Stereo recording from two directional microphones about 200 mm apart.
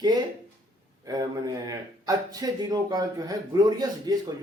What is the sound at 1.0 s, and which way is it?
Speech, 20° right (ahead or behind).